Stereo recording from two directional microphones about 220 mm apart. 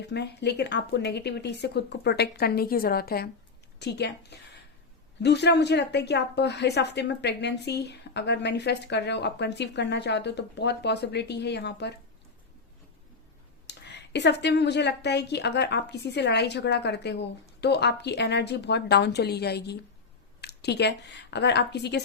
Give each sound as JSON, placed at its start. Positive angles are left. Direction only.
{"t": 0.1, "sound": "a woman's voice", "side_deg": 50}
{"t": 13.7, "sound": "a woman's voice", "side_deg": 50}